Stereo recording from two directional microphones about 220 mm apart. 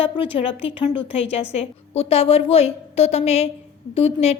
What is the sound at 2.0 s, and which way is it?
A woman's voice, 25° left (ahead or behind).